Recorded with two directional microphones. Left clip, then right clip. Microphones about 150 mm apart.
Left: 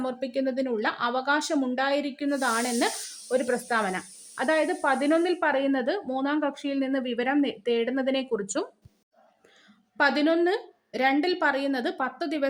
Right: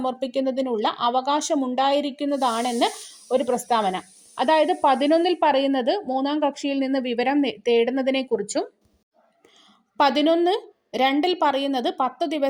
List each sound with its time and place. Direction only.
0.0 s speech: 20° right (ahead or behind)
10.0 s speech: 25° right (ahead or behind)